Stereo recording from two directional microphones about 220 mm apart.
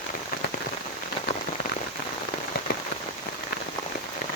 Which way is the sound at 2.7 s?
45° left (ahead or behind).